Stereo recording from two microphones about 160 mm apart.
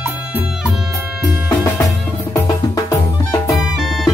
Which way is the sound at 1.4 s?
15° left (ahead or behind).